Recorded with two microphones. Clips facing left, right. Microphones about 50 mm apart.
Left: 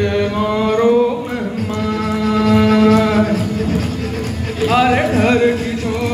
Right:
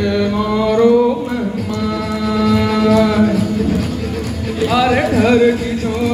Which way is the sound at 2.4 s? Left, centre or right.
Left.